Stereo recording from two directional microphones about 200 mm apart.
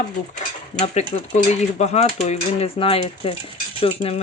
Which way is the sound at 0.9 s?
35° left (ahead or behind).